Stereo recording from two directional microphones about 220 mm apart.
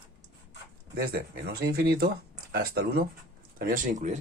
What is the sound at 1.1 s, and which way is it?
Speech, 45° right (ahead or behind).